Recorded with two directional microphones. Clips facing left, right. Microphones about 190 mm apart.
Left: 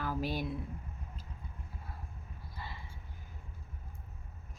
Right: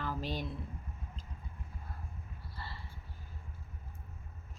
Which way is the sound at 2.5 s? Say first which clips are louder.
Left 1 dB; 15° left (ahead or behind).